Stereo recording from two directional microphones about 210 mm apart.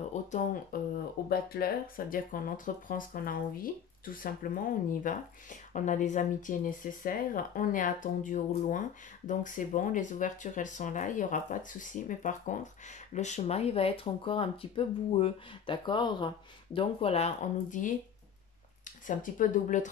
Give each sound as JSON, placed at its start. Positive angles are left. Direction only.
{"t": 0.1, "sound": "a sound", "side_deg": 35}
{"t": 0.7, "sound": "speech", "side_deg": 45}
{"t": 19.0, "sound": "speech", "side_deg": 40}